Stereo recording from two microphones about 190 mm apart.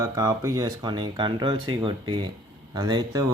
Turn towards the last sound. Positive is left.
turn(degrees=-20)  # may be behind; listen again after turning